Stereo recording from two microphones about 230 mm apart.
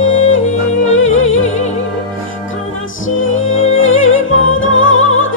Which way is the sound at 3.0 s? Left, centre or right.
Left.